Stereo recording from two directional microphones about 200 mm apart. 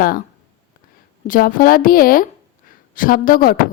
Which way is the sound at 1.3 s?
45° left (ahead or behind).